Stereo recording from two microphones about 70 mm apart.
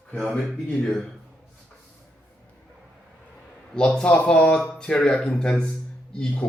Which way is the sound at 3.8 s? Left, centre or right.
Centre.